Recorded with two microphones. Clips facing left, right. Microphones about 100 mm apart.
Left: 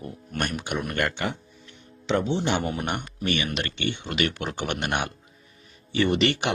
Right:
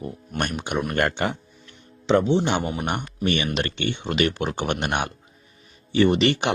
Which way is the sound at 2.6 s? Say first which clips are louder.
Right 1 dB; 15° right (ahead or behind).